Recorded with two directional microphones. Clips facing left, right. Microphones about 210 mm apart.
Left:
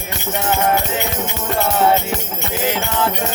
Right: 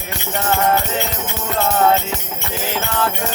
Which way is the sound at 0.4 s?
15° left (ahead or behind).